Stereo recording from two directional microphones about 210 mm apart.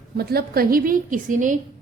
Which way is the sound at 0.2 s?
45° right (ahead or behind).